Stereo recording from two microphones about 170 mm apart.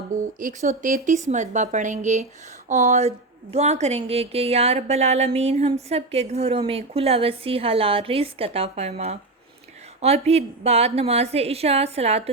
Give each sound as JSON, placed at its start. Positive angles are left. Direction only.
{"t": 0.1, "sound": "speech", "side_deg": -50}